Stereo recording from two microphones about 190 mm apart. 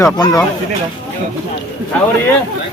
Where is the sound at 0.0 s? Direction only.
15° left (ahead or behind).